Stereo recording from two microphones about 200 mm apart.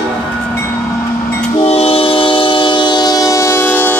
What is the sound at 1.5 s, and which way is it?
Train, 30° left (ahead or behind).